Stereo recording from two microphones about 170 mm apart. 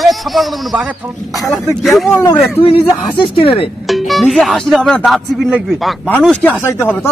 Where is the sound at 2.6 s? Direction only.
35° left (ahead or behind).